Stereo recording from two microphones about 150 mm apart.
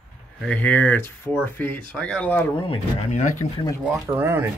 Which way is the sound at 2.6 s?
40° left (ahead or behind).